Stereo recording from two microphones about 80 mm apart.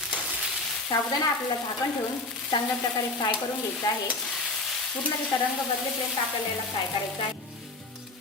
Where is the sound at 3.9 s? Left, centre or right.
Left.